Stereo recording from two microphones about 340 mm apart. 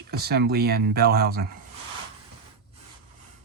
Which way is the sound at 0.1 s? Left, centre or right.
Right.